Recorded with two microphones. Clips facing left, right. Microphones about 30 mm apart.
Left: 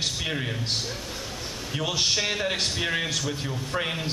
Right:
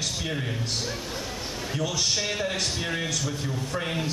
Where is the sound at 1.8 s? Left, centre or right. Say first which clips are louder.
Left 2 dB; left.